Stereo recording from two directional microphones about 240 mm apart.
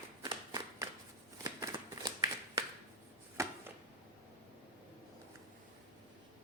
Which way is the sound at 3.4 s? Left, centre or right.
Centre.